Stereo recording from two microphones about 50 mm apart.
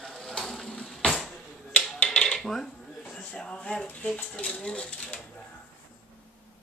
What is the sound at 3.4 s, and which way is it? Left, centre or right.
Speech, centre.